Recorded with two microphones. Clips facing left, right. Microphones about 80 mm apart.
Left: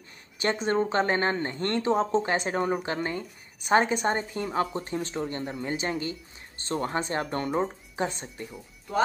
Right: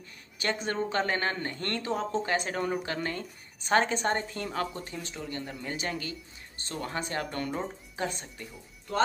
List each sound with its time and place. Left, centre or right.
0.4 s speech: left